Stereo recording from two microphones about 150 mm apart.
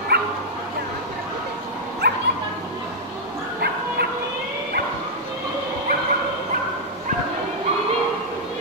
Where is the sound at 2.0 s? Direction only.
90° right.